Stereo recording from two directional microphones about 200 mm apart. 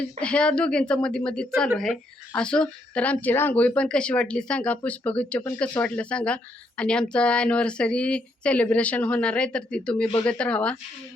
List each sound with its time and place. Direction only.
0.2 s speech: 5° left (ahead or behind)